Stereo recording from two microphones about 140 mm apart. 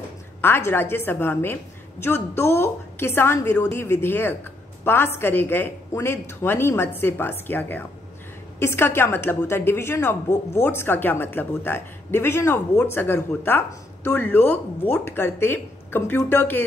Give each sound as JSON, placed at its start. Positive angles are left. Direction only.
{"t": 0.4, "sound": "a woman's voice", "side_deg": 15}